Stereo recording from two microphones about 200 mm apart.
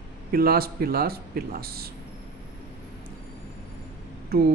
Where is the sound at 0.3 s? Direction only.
50° right (ahead or behind).